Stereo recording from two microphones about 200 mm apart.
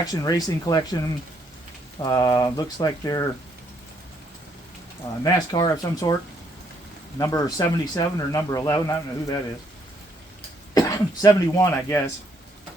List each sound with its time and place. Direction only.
0.0 s speech: 20° left (ahead or behind)
5.2 s speech: 15° left (ahead or behind)
7.2 s speech: 15° left (ahead or behind)
10.8 s speech: 20° left (ahead or behind)